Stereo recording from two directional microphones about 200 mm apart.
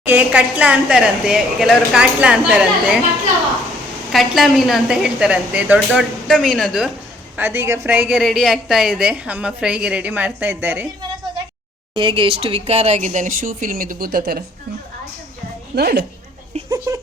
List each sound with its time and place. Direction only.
0.0 s a woman's voice: 10° right (ahead or behind)
4.1 s a woman's voice: centre (ahead or behind)
11.9 s speech: 25° right (ahead or behind); by 14.4 s 50° right (ahead or behind)
15.7 s a woman's voice: 55° right (ahead or behind)
16.6 s speech: 15° right (ahead or behind)